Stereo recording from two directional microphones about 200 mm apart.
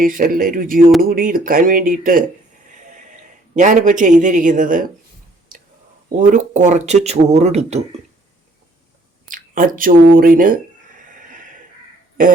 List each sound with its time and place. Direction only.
0.0 s a man's voice: 45° right (ahead or behind)
6.2 s speech: 35° right (ahead or behind)
9.3 s speech: 45° right (ahead or behind)